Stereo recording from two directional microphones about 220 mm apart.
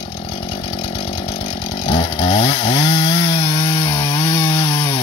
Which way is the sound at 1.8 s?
25° left (ahead or behind).